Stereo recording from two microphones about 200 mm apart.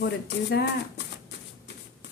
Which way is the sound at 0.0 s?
55° left (ahead or behind).